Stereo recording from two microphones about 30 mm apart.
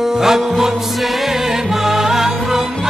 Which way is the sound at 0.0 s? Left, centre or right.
Centre.